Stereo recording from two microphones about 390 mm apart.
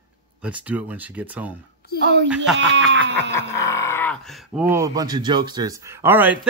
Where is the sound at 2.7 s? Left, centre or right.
Right.